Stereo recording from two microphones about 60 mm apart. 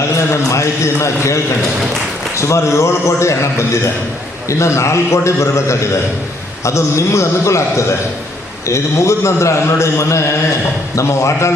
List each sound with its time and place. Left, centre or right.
0.3 s a man's voice: left
2.4 s a man's voice: left